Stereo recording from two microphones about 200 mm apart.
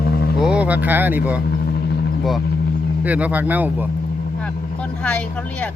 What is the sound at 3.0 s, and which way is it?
Speech, 5° right (ahead or behind).